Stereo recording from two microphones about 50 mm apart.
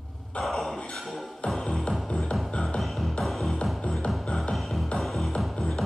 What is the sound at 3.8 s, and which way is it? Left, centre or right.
Music, centre.